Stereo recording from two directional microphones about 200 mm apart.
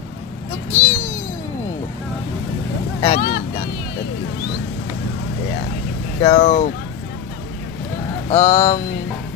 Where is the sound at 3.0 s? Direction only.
35° left (ahead or behind).